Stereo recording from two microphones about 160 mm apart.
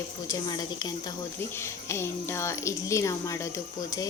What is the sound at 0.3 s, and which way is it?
Speech, 25° left (ahead or behind).